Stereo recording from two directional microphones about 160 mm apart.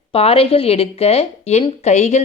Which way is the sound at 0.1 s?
35° left (ahead or behind).